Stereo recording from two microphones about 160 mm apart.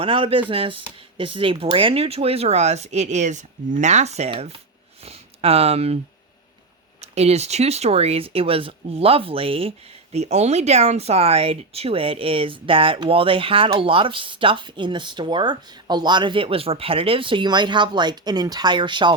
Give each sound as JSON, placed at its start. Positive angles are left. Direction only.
{"t": 0.0, "sound": "speech", "side_deg": -35}
{"t": 7.0, "sound": "speech", "side_deg": -40}